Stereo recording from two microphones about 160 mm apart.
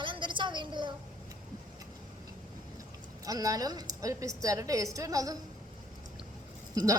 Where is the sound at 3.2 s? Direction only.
20° right (ahead or behind).